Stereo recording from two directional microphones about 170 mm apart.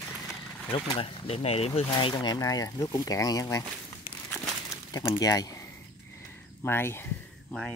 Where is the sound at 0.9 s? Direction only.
30° left (ahead or behind).